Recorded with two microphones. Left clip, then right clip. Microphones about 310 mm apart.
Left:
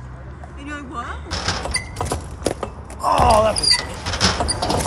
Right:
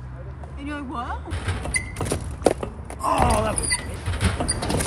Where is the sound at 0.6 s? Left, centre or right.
Centre.